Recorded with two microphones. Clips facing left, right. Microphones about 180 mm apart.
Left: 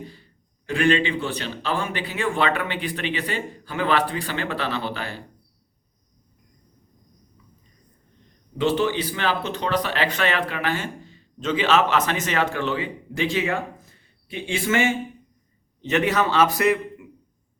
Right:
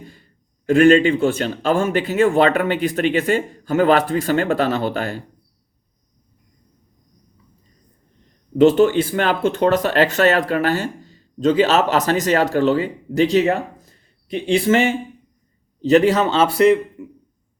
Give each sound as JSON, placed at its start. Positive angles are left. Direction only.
{"t": 0.1, "sound": "a man's voice", "side_deg": -45}
{"t": 8.5, "sound": "a man's voice", "side_deg": -45}